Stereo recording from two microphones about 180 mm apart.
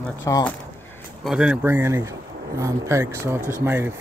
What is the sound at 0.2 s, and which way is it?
Speech, 20° left (ahead or behind).